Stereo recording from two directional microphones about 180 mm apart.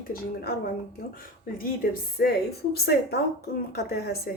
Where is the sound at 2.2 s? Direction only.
60° left (ahead or behind).